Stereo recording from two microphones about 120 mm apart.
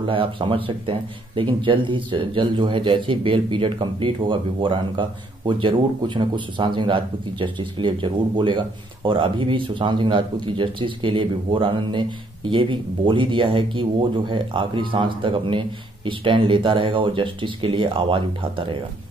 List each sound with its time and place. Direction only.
0.0 s speech: 45° right (ahead or behind)